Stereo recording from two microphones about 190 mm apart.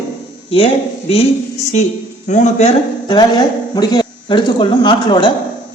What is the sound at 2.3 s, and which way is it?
Speech, 40° left (ahead or behind).